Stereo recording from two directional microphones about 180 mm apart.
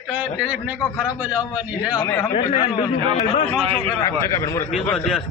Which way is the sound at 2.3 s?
35° left (ahead or behind).